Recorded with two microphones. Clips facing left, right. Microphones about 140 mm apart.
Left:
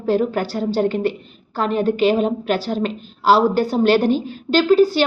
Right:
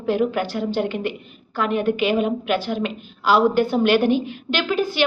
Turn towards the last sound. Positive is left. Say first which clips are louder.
# left 7 dB
turn(degrees=40)  # may be behind; listen again after turning